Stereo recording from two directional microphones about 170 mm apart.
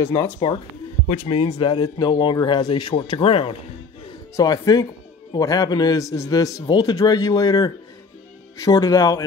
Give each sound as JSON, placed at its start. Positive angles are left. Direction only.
{"t": 1.0, "sound": "speech", "side_deg": 35}
{"t": 4.4, "sound": "speech", "side_deg": 20}